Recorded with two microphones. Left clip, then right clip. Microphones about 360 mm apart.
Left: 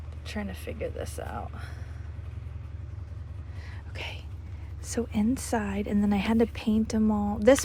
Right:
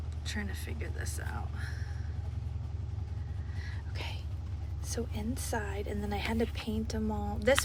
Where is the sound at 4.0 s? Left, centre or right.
Centre.